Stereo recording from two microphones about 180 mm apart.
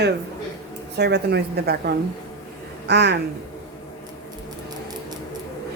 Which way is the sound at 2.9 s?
70° right (ahead or behind).